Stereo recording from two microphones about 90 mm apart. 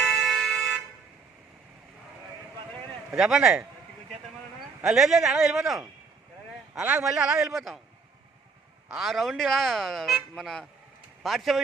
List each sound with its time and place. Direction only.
0.0 s a sound: centre (ahead or behind)
3.1 s speech: 5° right (ahead or behind)
4.8 s speech: 5° right (ahead or behind)
6.7 s a man's voice: 15° right (ahead or behind); by 7.8 s centre (ahead or behind)
9.0 s speech: centre (ahead or behind)